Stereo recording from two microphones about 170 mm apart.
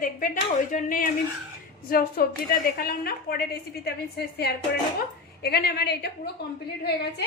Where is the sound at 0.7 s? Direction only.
50° left (ahead or behind).